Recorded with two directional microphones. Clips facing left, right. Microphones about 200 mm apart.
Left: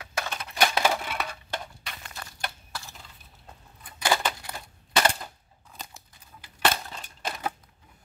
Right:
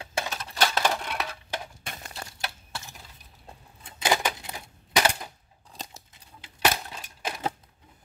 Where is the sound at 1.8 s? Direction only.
40° right (ahead or behind).